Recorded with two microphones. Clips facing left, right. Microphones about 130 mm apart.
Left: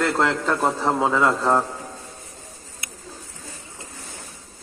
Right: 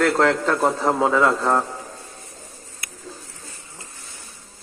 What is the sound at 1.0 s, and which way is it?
Speech, 15° left (ahead or behind).